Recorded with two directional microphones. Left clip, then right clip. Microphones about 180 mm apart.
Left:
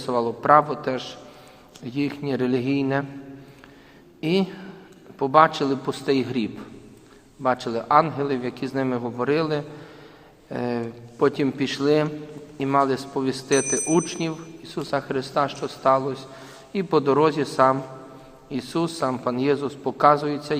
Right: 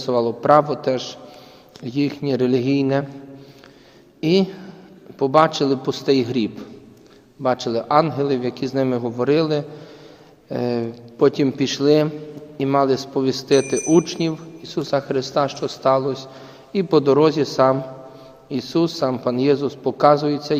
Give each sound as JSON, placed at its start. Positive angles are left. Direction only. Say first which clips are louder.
{"t": 0.0, "sound": "speech", "louder": "right 4 dB", "side_deg": -40}
{"t": 4.2, "sound": "speech", "louder": "right 5 dB", "side_deg": -40}